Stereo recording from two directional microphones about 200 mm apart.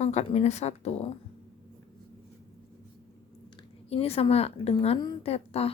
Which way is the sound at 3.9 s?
30° left (ahead or behind).